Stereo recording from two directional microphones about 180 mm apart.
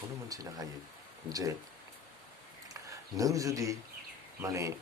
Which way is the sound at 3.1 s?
20° right (ahead or behind).